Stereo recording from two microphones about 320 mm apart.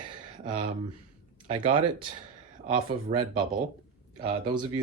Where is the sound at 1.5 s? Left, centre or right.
Centre.